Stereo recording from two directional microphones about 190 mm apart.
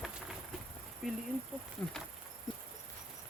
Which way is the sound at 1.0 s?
Centre (ahead or behind).